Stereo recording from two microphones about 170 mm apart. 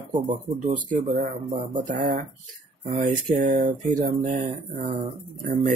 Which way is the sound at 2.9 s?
50° right (ahead or behind).